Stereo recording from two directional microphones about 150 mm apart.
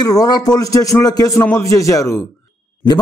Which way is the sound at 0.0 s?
25° left (ahead or behind).